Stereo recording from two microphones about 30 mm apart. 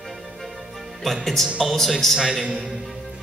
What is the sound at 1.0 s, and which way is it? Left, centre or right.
Speech, centre.